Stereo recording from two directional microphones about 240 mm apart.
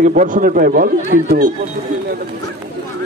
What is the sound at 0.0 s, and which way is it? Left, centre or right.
A man's voice, right.